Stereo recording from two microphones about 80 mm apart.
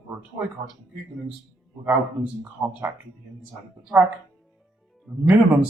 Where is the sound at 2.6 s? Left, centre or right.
Right.